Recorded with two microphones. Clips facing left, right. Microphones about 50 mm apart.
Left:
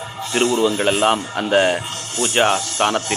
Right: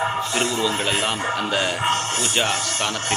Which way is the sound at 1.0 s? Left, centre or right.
Left.